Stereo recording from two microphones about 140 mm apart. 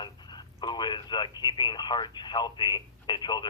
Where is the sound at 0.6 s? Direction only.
30° left (ahead or behind).